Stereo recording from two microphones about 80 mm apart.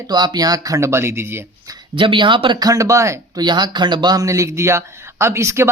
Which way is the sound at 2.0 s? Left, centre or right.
Right.